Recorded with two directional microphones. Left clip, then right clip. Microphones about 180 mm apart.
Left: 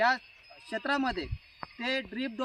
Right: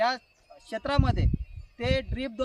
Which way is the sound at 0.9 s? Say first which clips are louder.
Right 1 dB; 35° right (ahead or behind).